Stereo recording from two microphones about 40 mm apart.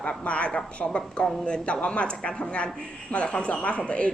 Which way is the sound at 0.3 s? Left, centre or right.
Left.